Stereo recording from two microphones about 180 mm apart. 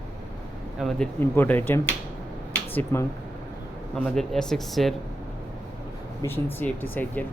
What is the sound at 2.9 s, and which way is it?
Speech, 15° left (ahead or behind).